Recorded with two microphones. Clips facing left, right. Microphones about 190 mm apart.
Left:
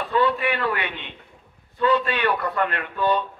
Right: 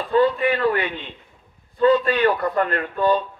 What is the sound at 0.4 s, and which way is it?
Speech, 35° right (ahead or behind).